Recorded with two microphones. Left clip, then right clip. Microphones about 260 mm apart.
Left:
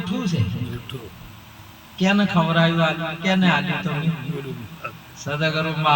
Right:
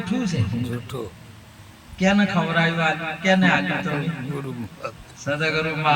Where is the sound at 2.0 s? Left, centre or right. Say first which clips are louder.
Even; left.